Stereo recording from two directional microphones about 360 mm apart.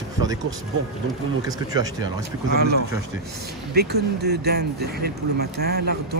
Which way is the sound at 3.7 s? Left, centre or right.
Right.